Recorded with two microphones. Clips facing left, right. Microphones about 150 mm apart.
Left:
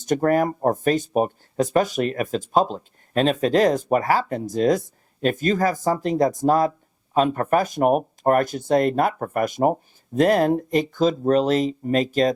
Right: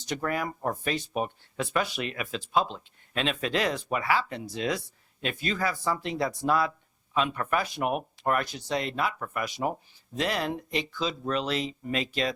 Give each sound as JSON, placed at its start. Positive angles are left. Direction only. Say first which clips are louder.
{"t": 0.0, "sound": "speech", "louder": "left 11 dB", "side_deg": 45}